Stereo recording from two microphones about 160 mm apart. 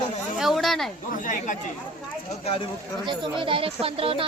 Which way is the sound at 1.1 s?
55° left (ahead or behind).